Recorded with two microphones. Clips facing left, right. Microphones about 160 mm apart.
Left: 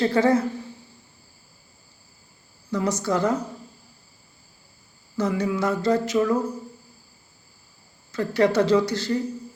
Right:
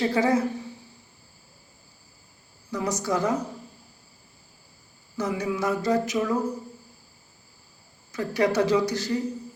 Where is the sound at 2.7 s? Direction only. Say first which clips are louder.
Left 4 dB; 15° right (ahead or behind).